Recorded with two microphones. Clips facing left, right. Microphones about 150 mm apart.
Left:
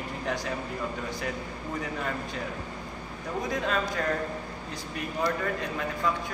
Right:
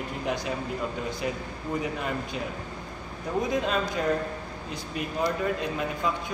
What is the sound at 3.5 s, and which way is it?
Speech, 20° right (ahead or behind).